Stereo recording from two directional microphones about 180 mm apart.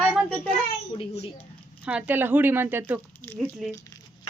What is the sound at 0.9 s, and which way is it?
Speech, 35° left (ahead or behind).